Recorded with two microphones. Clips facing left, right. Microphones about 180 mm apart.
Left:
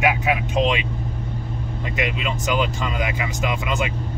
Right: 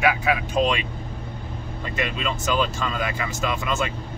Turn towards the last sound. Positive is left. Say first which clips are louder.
# left 1 dB
turn(degrees=15)  # may be behind; listen again after turning